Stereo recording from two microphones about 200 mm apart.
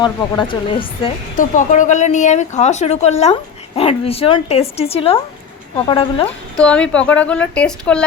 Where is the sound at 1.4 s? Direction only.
40° left (ahead or behind).